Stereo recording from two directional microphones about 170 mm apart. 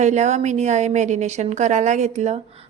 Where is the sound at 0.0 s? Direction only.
45° right (ahead or behind).